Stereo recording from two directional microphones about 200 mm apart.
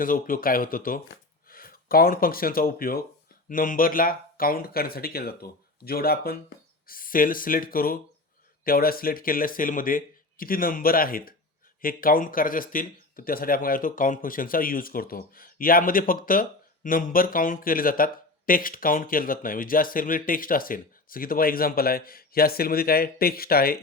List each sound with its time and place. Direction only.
0.0 s speech: 45° left (ahead or behind)